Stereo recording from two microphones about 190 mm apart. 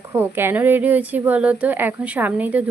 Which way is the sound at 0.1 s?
10° right (ahead or behind).